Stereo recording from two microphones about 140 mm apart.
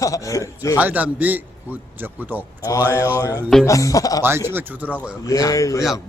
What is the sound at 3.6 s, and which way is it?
Speech, 25° left (ahead or behind).